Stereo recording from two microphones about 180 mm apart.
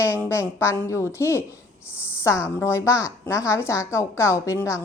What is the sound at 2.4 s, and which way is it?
A woman's voice, 10° left (ahead or behind).